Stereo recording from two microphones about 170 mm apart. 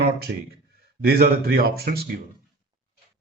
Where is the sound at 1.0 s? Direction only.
65° right (ahead or behind).